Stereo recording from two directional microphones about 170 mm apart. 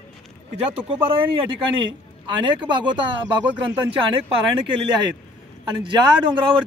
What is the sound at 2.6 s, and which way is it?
Speech, 25° right (ahead or behind).